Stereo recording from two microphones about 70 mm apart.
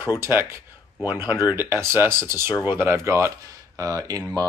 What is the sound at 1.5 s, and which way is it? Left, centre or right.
Speech, right.